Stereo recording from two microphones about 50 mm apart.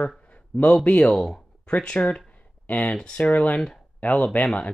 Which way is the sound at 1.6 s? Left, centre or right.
Left.